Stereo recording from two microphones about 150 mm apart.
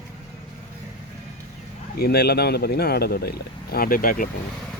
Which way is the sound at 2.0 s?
90° left.